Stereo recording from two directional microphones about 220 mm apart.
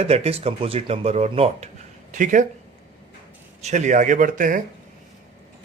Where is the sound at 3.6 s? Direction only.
35° right (ahead or behind).